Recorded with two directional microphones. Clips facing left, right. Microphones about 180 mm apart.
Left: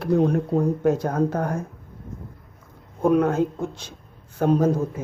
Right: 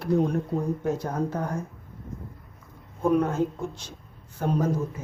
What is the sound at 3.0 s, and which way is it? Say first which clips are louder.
Speech: left 4 dB; 80° left.